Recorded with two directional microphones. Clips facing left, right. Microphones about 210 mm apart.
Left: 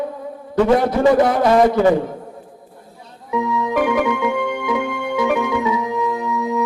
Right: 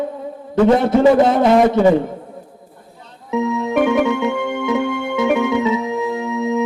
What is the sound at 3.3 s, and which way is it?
Music, 25° right (ahead or behind).